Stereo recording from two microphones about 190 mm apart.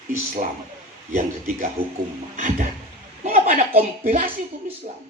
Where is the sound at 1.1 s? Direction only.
50° right (ahead or behind).